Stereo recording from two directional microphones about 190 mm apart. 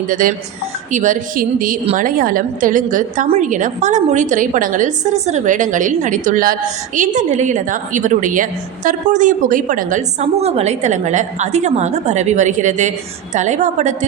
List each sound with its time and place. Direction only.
0.1 s a woman's voice: 45° right (ahead or behind)